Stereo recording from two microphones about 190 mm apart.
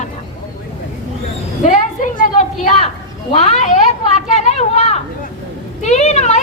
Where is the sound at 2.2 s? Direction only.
35° left (ahead or behind).